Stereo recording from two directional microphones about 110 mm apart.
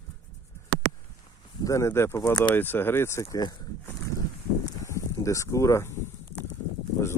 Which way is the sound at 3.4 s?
40° left (ahead or behind).